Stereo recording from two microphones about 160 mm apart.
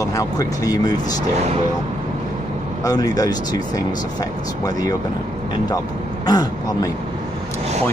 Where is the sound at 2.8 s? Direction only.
20° left (ahead or behind).